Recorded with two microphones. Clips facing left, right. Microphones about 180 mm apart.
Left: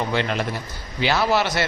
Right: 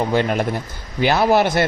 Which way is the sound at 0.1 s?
45° right (ahead or behind).